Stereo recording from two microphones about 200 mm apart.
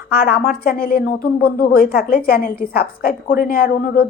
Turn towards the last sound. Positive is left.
turn(degrees=45)  # may be behind; listen again after turning